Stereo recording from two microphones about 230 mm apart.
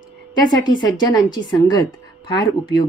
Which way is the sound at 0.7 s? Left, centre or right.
Centre.